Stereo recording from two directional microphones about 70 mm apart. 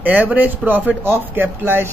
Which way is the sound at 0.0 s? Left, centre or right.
Right.